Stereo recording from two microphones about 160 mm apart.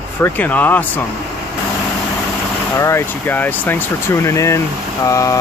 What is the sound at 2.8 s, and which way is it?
Speech, 15° left (ahead or behind).